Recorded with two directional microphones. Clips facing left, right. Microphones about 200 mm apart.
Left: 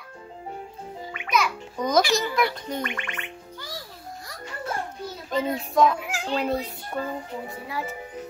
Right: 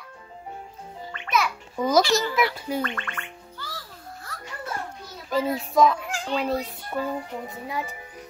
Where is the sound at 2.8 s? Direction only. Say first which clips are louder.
Right 1 dB; 15° left (ahead or behind).